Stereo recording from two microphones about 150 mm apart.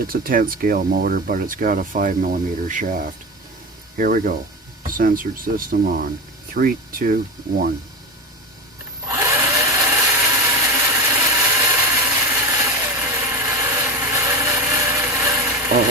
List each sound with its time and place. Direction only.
0.1 s speech: 70° right (ahead or behind)
6.6 s speech: 90° right
9.0 s tools: 20° right (ahead or behind)
14.7 s a sound: 20° right (ahead or behind)